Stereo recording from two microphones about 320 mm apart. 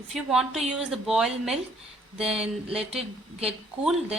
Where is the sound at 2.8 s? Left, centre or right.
Centre.